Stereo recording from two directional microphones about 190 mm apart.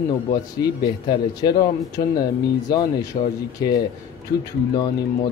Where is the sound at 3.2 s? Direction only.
30° left (ahead or behind).